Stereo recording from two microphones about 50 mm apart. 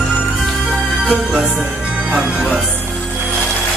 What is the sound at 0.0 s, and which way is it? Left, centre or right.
Music, centre.